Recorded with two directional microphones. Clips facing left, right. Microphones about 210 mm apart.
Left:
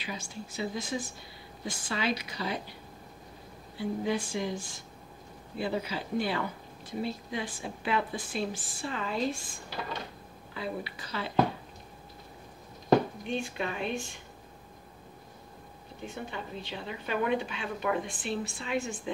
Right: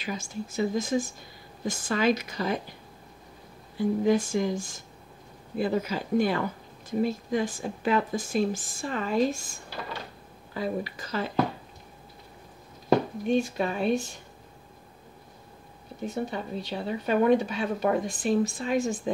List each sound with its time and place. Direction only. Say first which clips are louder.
0.0 s speech: right 6 dB; 45° right (ahead or behind)
3.7 s speech: right 7 dB; 45° right (ahead or behind)
10.5 s speech: right 6 dB; 45° right (ahead or behind)
13.3 s speech: right 9 dB; 40° right (ahead or behind)
16.0 s speech: right 8 dB; 40° right (ahead or behind)